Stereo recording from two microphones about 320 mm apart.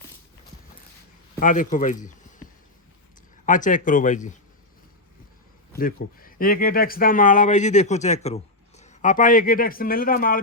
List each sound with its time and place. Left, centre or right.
1.4 s speech: left
3.4 s speech: left
5.7 s speech: left